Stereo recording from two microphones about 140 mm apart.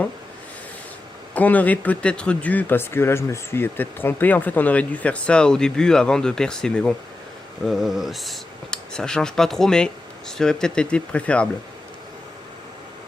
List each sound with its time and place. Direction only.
1.3 s speech: 10° left (ahead or behind)